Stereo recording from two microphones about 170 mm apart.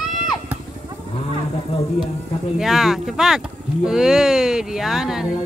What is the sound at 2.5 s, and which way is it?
Speech, centre (ahead or behind).